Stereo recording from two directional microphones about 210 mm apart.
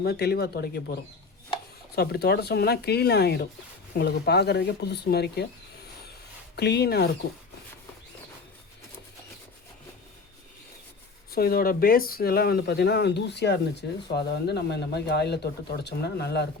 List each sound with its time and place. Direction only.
0.0 s speech: 50° left (ahead or behind)
2.0 s speech: 50° left (ahead or behind)
6.6 s speech: 50° left (ahead or behind)
11.3 s speech: 45° left (ahead or behind)